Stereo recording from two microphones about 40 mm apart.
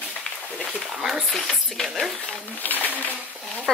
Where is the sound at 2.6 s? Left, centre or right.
Left.